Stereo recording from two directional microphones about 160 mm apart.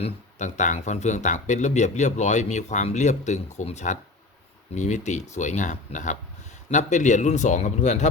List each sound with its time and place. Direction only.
0.0 s speech: 50° left (ahead or behind)